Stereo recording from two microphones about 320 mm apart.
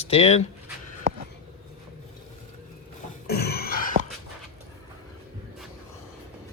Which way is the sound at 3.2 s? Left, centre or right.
Left.